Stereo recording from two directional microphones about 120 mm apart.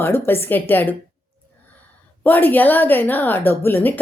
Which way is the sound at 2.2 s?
15° left (ahead or behind).